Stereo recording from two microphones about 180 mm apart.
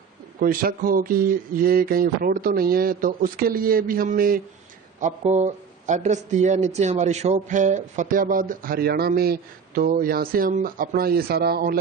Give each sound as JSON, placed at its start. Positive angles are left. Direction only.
{"t": 0.3, "sound": "speech", "side_deg": -50}